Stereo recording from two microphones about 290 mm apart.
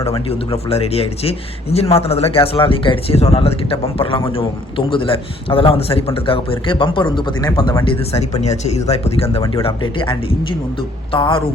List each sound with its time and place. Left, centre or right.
0.0 s a man's voice: centre